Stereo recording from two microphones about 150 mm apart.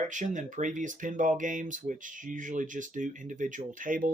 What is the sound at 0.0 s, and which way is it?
Speech, 55° right (ahead or behind).